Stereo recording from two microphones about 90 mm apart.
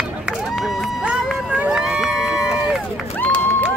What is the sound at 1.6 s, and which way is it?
Run, 10° right (ahead or behind).